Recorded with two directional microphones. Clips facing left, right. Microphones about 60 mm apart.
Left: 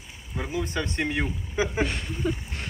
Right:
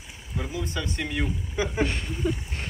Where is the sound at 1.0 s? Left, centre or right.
Left.